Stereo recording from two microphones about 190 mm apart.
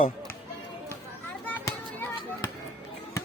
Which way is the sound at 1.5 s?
10° left (ahead or behind).